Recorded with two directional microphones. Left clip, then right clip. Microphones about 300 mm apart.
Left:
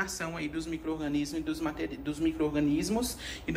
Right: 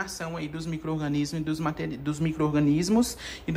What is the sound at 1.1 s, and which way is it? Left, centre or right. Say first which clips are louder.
A man's voice: right 3 dB; right.